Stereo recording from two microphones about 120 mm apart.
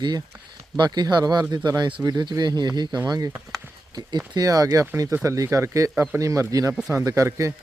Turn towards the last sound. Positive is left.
turn(degrees=-25)  # may be behind; listen again after turning